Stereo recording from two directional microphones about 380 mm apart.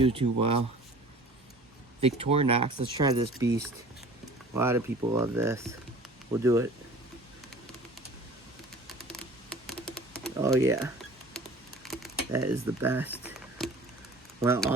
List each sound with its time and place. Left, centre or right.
0.0 s speech: centre
2.0 s speech: centre
9.6 s a sound: centre
10.3 s speech: centre
11.9 s typing: centre
12.8 s a sound: centre
14.4 s speech: centre